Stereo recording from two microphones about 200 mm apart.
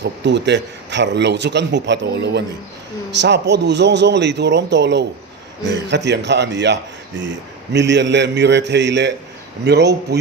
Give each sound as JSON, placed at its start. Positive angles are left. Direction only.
{"t": 0.0, "sound": "a man's voice", "side_deg": -60}